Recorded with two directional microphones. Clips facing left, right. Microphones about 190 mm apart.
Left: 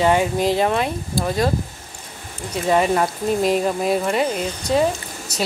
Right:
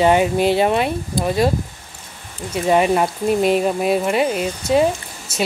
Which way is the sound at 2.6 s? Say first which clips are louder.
Right 2 dB; 15° right (ahead or behind).